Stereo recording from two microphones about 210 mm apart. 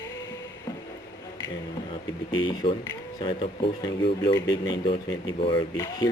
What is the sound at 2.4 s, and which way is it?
Speech, 20° left (ahead or behind).